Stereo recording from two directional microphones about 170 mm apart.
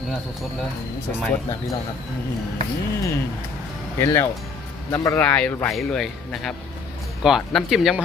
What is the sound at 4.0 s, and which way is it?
Speech, 15° left (ahead or behind).